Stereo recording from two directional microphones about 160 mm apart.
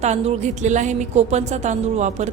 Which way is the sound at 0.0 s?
45° right (ahead or behind).